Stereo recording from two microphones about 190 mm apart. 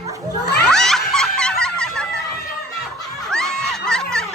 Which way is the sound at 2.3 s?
55° left (ahead or behind).